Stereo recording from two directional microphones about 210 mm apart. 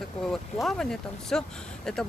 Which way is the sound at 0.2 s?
Centre (ahead or behind).